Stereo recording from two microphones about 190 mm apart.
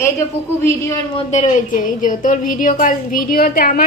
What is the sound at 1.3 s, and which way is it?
A woman's voice, 40° left (ahead or behind).